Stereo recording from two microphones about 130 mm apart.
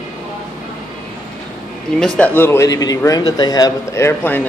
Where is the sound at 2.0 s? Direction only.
10° left (ahead or behind).